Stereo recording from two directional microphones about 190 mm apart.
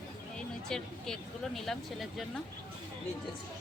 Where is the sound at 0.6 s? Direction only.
5° left (ahead or behind).